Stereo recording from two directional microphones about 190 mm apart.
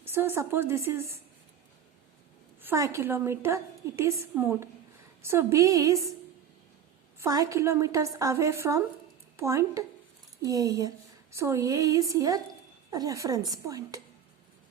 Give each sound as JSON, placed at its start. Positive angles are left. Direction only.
{"t": 0.0, "sound": "a woman's voice", "side_deg": -10}
{"t": 2.6, "sound": "a woman's voice", "side_deg": -15}
{"t": 7.2, "sound": "a woman's voice", "side_deg": -15}